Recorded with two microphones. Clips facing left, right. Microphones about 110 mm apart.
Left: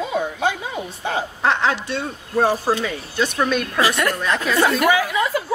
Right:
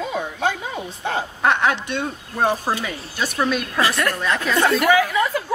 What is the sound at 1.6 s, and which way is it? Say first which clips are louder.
Speech: even; 60° right (ahead or behind).